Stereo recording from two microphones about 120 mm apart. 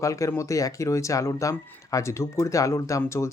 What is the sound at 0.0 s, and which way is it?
Speech, 25° left (ahead or behind).